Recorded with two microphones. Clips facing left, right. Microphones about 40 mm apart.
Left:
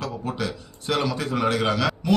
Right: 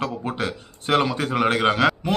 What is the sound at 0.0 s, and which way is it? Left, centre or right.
A man's voice, right.